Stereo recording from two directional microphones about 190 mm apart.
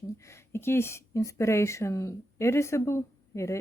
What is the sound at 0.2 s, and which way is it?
Speech, 15° left (ahead or behind).